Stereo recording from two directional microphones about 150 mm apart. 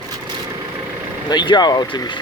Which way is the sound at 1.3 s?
30° left (ahead or behind).